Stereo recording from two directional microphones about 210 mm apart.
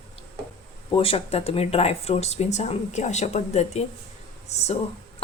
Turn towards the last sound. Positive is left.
turn(degrees=30)  # may be behind; listen again after turning